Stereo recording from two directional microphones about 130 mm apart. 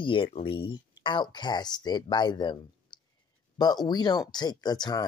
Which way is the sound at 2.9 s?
35° left (ahead or behind).